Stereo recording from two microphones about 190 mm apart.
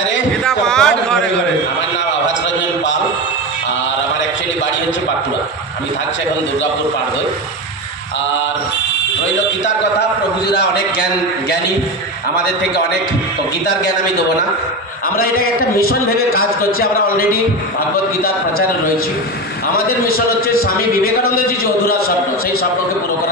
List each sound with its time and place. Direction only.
0.5 s a man's voice: 5° left (ahead or behind)
15.1 s a man's voice: 50° left (ahead or behind)
20.4 s a man's voice: 50° left (ahead or behind)